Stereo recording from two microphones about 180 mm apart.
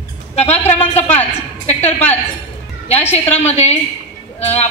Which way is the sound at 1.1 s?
35° left (ahead or behind).